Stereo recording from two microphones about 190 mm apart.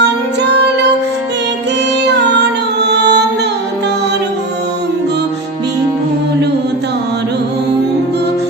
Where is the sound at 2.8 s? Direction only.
65° right (ahead or behind).